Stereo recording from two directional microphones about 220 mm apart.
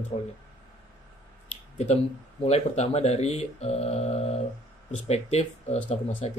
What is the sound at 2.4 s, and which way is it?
Speech, 30° left (ahead or behind).